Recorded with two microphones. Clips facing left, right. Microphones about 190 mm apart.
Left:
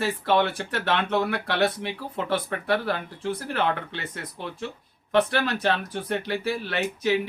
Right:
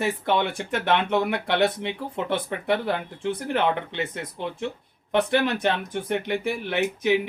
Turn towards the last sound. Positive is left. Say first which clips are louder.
# right 2 dB
turn(degrees=-15)  # may be behind; listen again after turning